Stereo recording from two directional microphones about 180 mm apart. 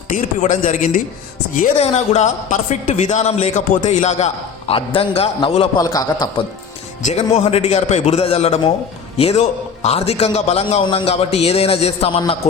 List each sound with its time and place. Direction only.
0.1 s a man's voice: 45° left (ahead or behind); by 6.2 s 20° left (ahead or behind)
7.0 s a man's voice: 40° left (ahead or behind)